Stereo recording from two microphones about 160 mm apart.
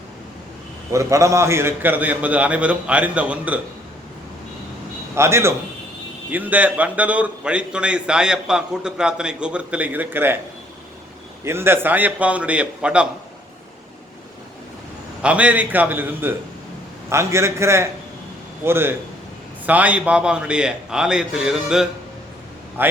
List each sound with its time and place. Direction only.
0.9 s a man's voice: 20° right (ahead or behind)
5.1 s a man's voice: 15° right (ahead or behind)
11.4 s a man's voice: 15° right (ahead or behind)
15.2 s a man's voice: 10° right (ahead or behind)